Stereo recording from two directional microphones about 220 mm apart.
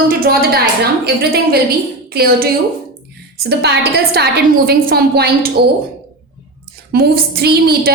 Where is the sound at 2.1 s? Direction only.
45° right (ahead or behind).